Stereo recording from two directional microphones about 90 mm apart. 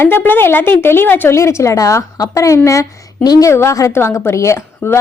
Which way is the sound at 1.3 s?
35° left (ahead or behind).